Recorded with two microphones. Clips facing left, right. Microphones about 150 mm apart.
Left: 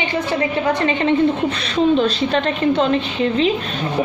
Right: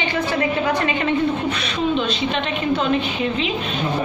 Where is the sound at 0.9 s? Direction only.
25° left (ahead or behind).